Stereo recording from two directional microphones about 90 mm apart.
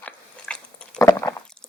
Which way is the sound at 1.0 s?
35° left (ahead or behind).